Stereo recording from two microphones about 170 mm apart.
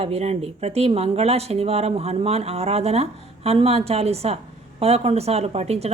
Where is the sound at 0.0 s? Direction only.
35° right (ahead or behind).